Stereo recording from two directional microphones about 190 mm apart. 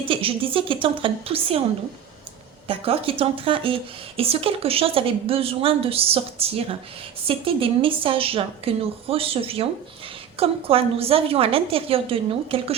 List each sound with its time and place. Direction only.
0.0 s a woman's voice: 30° right (ahead or behind)
2.6 s a woman's voice: 30° right (ahead or behind)